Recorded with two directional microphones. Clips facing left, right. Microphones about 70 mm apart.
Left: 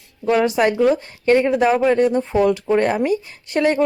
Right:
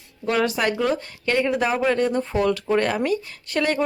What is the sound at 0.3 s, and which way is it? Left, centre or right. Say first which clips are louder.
Speech: left 5 dB; left.